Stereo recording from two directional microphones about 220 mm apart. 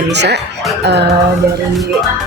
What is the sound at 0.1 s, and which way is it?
Speech, 50° right (ahead or behind).